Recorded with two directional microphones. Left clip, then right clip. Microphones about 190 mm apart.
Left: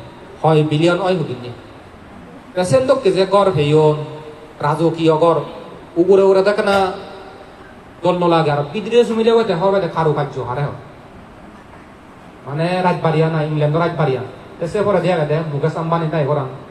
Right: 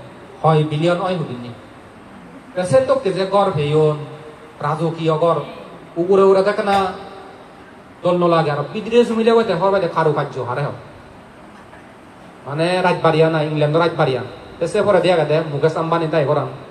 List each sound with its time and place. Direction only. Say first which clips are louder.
0.4 s a man's voice: left 2 dB; 60° left (ahead or behind)
2.5 s a man's voice: left 1 dB; 60° left (ahead or behind)
8.0 s a man's voice: left 1 dB; 45° left (ahead or behind); by 10.4 s 10° left (ahead or behind)
12.5 s a man's voice: right 1 dB; 15° right (ahead or behind)